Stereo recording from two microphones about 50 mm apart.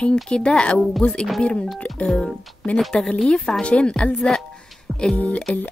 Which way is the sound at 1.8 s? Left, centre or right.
Centre.